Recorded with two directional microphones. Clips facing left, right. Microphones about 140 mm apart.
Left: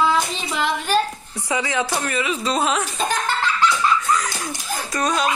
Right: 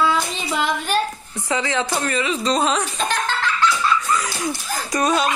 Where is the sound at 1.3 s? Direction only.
10° left (ahead or behind).